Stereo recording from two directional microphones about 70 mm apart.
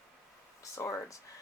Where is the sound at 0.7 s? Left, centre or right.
Left.